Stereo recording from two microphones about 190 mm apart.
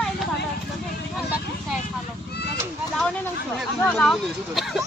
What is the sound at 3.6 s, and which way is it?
Speech, 5° left (ahead or behind).